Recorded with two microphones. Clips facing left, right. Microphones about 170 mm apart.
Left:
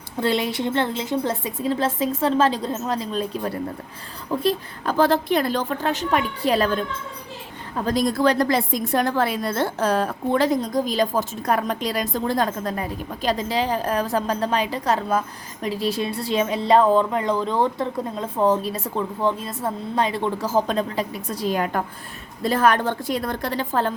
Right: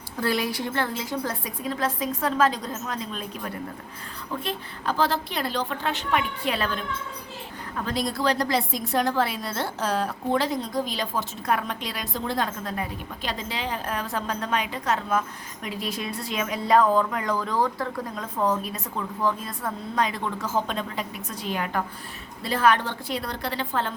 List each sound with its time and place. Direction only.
0.2 s speech: 25° left (ahead or behind)
4.4 s a woman's voice: 50° left (ahead or behind)
7.8 s a woman's voice: 40° left (ahead or behind)